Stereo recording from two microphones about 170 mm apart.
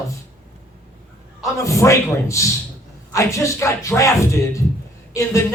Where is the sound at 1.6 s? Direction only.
15° left (ahead or behind).